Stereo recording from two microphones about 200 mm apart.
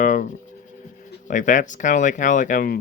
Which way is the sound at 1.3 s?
40° left (ahead or behind).